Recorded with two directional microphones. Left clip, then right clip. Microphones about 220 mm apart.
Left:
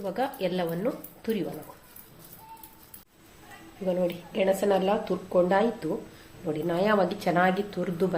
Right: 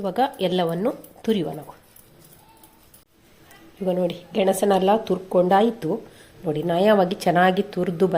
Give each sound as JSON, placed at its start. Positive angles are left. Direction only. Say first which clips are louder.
{"t": 0.0, "sound": "speech", "louder": "right 7 dB", "side_deg": -40}
{"t": 3.8, "sound": "speech", "louder": "right 4 dB", "side_deg": -40}